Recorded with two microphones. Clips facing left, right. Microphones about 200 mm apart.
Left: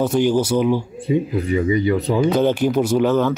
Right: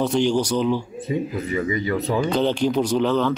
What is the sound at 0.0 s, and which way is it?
Speech, 5° left (ahead or behind).